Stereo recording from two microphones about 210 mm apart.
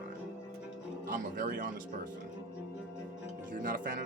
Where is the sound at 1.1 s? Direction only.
40° right (ahead or behind).